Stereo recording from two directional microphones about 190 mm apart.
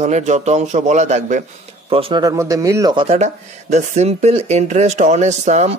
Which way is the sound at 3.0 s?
35° right (ahead or behind).